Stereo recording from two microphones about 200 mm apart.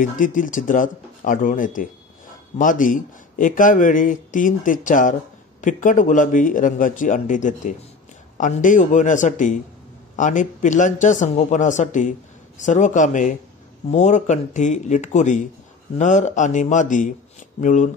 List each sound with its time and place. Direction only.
0.0 s speech: 40° left (ahead or behind)